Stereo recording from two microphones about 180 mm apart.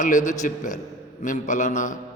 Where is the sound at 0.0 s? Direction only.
45° left (ahead or behind).